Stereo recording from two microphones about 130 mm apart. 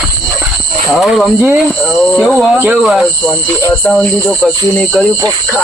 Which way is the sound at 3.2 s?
10° left (ahead or behind).